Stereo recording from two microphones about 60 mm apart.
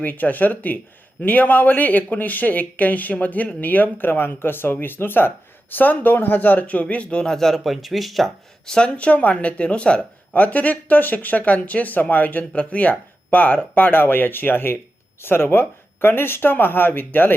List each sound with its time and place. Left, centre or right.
0.0 s speech: left
7.3 s speech: centre; by 17.3 s left